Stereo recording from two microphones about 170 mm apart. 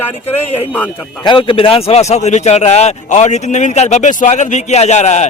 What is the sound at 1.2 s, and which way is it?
A man's voice, 30° left (ahead or behind).